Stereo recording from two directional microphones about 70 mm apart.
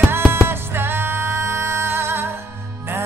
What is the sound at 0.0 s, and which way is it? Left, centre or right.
Music, right.